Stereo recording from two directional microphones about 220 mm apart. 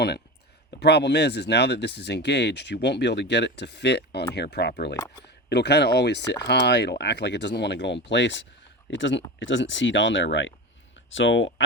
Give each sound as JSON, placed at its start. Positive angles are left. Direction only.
{"t": 0.8, "sound": "speech", "side_deg": 50}
{"t": 4.9, "sound": "speech", "side_deg": 15}
{"t": 5.2, "sound": "speech", "side_deg": 50}